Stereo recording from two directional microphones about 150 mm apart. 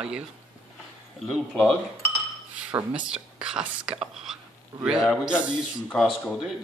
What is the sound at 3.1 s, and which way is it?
A man's voice, 5° right (ahead or behind).